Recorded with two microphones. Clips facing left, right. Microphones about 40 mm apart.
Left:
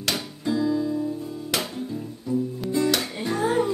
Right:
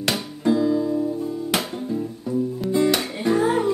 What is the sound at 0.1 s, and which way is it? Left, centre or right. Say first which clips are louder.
Music: right 5 dB; right.